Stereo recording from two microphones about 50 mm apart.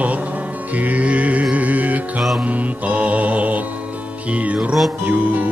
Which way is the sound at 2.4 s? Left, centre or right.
Right.